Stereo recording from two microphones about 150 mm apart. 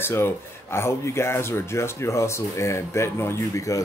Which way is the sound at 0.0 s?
15° left (ahead or behind).